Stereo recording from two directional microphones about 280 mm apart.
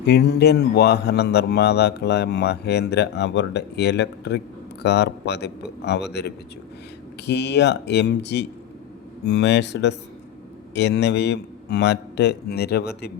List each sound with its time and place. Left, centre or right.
0.0 s speech: left